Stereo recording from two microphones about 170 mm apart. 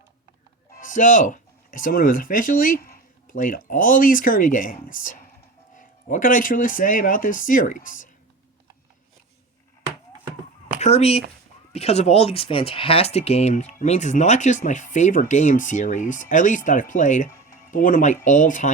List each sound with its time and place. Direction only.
0.8 s speech: 50° left (ahead or behind)
10.8 s speech: 40° left (ahead or behind)